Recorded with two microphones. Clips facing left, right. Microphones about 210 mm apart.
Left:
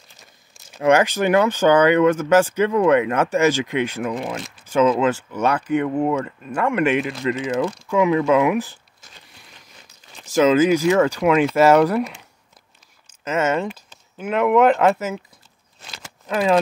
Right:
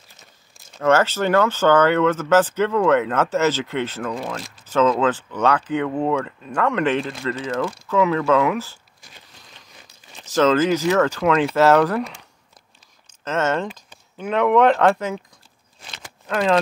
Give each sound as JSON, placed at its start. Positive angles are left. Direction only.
{"t": 0.7, "sound": "speech", "side_deg": 15}
{"t": 10.2, "sound": "speech", "side_deg": 10}
{"t": 13.2, "sound": "speech", "side_deg": 10}
{"t": 15.8, "sound": "a sound", "side_deg": 5}